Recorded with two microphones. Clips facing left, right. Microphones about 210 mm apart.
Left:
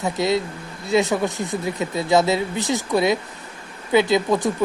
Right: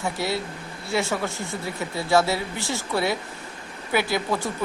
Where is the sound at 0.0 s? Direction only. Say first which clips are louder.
Left 6 dB; 20° left (ahead or behind).